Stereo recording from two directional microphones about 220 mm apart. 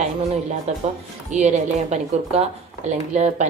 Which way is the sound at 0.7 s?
30° right (ahead or behind).